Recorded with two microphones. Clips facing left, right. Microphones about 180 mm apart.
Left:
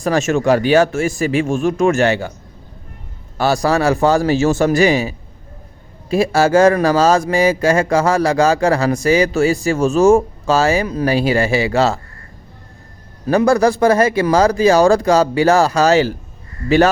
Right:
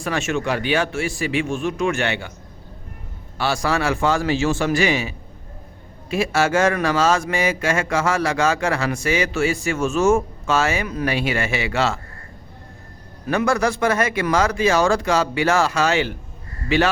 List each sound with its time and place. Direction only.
0.0 s speech: 40° left (ahead or behind)
3.3 s speech: 40° left (ahead or behind)
13.2 s speech: 35° left (ahead or behind)